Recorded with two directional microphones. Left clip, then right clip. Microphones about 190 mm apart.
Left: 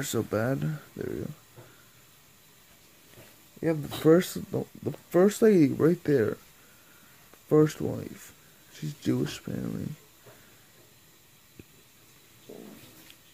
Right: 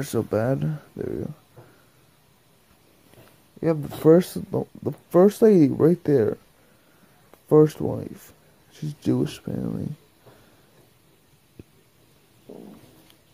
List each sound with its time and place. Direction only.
0.0 s speech: 10° right (ahead or behind)
4.0 s speech: 10° right (ahead or behind)
7.4 s speech: 10° right (ahead or behind)